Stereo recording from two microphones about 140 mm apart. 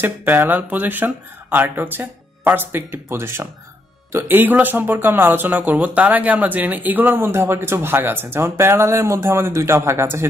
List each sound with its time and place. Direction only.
0.0 s speech: 15° right (ahead or behind)